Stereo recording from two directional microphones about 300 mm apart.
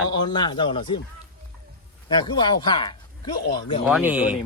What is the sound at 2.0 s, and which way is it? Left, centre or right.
Speech, centre.